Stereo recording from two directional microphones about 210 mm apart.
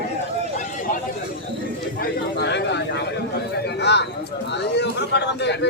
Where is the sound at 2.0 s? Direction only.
50° left (ahead or behind).